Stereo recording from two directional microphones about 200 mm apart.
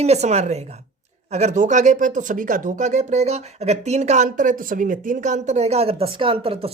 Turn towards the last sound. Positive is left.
turn(degrees=-30)  # may be behind; listen again after turning